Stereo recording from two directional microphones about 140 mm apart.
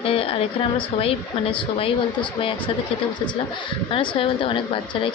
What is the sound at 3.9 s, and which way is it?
Speech, 40° left (ahead or behind).